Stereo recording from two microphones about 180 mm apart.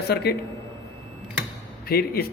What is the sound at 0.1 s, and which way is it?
Speech, 65° left (ahead or behind).